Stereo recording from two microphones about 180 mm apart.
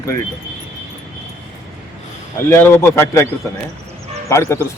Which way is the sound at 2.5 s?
10° left (ahead or behind).